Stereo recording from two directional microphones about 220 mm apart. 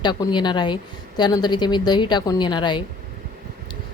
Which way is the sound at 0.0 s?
20° left (ahead or behind).